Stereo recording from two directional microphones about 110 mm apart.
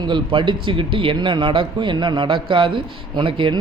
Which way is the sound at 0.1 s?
50° right (ahead or behind).